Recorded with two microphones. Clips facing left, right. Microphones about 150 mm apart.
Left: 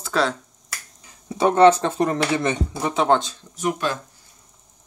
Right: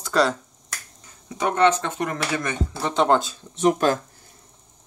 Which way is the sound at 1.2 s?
30° left (ahead or behind).